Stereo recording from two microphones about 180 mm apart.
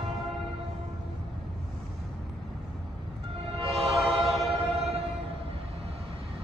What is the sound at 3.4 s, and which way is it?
Train, 30° right (ahead or behind).